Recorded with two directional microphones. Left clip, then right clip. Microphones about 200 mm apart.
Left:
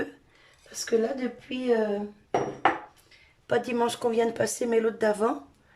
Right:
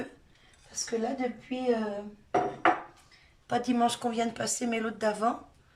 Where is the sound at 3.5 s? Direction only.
35° left (ahead or behind).